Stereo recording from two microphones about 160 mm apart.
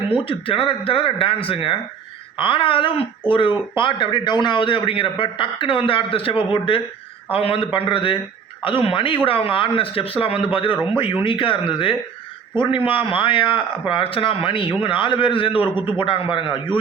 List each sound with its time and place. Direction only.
0.1 s a man's voice: 35° left (ahead or behind)